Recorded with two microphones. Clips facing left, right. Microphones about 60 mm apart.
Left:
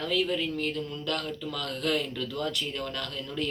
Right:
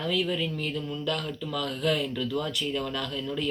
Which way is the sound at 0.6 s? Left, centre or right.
Centre.